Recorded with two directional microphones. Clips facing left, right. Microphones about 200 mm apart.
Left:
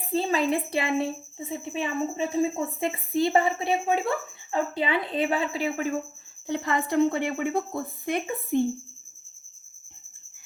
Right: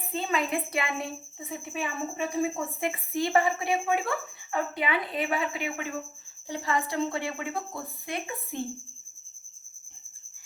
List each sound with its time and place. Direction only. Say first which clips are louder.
0.1 s a woman's voice: left 5 dB; 30° left (ahead or behind)
6.5 s a woman's voice: left 4 dB; 60° left (ahead or behind)